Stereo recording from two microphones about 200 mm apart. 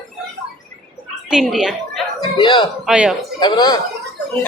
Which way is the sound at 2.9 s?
5° right (ahead or behind).